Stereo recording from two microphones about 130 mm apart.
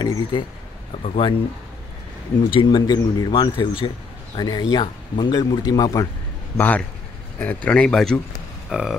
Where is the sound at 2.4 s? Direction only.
35° left (ahead or behind).